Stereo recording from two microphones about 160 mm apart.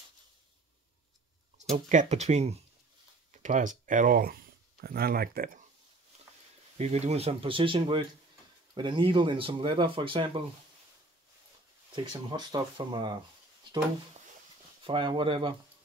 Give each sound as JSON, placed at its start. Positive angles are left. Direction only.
{"t": 1.6, "sound": "speech", "side_deg": -45}
{"t": 6.8, "sound": "speech", "side_deg": -40}
{"t": 11.9, "sound": "speech", "side_deg": -30}
{"t": 14.8, "sound": "speech", "side_deg": -30}